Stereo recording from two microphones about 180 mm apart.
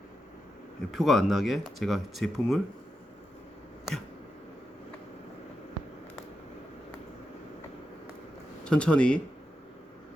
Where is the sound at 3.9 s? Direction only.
Centre (ahead or behind).